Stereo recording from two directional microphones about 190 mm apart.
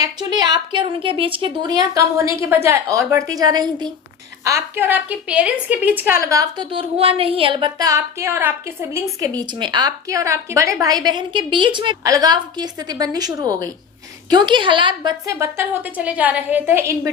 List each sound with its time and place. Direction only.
0.0 s a woman's voice: 20° right (ahead or behind)
9.4 s a woman's voice: 25° right (ahead or behind)